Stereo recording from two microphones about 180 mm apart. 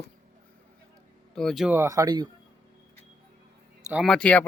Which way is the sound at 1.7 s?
15° right (ahead or behind).